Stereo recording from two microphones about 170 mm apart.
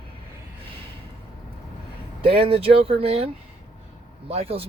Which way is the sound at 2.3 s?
35° right (ahead or behind).